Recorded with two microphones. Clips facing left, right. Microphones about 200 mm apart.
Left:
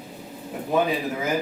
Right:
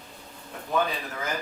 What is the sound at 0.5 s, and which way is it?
Speech, 10° left (ahead or behind).